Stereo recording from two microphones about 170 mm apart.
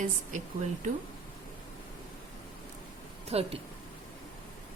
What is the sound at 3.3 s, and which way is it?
Speech, 35° right (ahead or behind).